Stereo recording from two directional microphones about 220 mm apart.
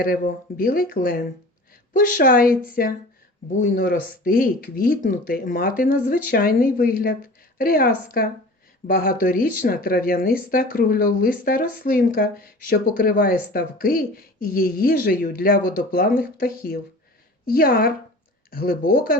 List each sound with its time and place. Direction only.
0.0 s speech: 40° left (ahead or behind)